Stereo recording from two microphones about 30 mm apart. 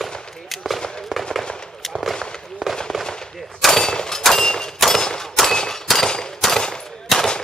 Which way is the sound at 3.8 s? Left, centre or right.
Left.